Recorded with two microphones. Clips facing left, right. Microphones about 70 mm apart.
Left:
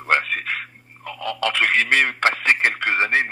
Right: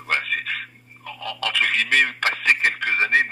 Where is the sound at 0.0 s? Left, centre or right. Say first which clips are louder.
Left 4 dB; left.